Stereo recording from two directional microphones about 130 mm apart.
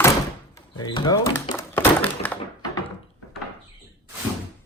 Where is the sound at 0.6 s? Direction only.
35° left (ahead or behind).